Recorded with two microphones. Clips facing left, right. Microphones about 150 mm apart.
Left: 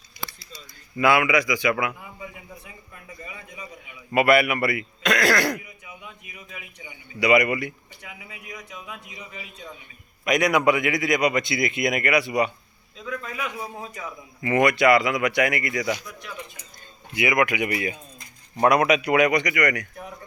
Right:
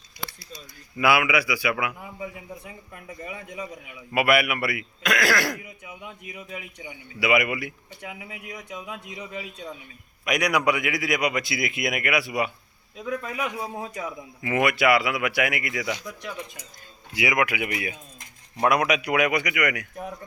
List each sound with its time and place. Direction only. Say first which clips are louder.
0.9 s a man's voice: left 2 dB; 10° right (ahead or behind)
4.1 s a man's voice: left 3 dB; 5° right (ahead or behind)
7.2 s a man's voice: left 3 dB; 5° right (ahead or behind)
8.0 s speech: right 4 dB; 25° right (ahead or behind)
10.2 s a man's voice: left 3 dB; centre (ahead or behind)
13.0 s speech: right 2 dB; 15° right (ahead or behind)
14.4 s a man's voice: left 3 dB; 5° right (ahead or behind)
17.2 s a man's voice: left 2 dB; 10° right (ahead or behind)